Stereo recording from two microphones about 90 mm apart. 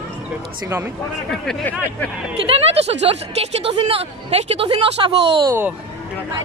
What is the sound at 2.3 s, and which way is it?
Speech, 90° right.